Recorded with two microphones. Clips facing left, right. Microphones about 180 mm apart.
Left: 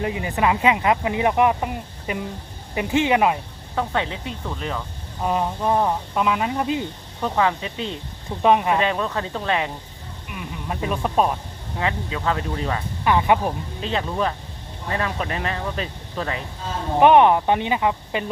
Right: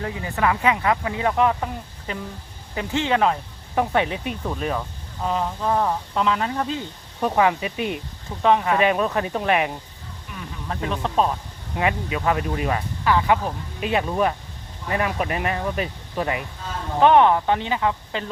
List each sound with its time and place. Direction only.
0.0 s speech: 15° left (ahead or behind)
3.8 s speech: 20° right (ahead or behind)
5.2 s speech: 15° left (ahead or behind)
7.2 s speech: 15° right (ahead or behind)
8.4 s speech: 15° left (ahead or behind)
8.8 s speech: 15° right (ahead or behind)
10.2 s speech: 10° left (ahead or behind)
11.8 s speech: 15° right (ahead or behind)
13.1 s speech: 20° left (ahead or behind)
13.8 s speech: 15° right (ahead or behind)
17.0 s speech: 15° left (ahead or behind)